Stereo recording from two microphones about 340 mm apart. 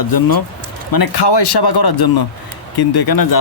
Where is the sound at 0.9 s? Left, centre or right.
Left.